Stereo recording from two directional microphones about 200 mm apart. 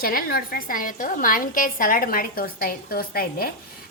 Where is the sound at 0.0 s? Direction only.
45° left (ahead or behind).